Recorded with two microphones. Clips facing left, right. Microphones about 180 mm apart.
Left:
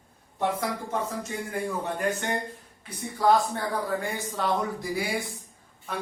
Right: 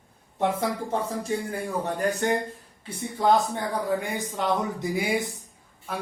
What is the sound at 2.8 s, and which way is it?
Speech, 20° right (ahead or behind).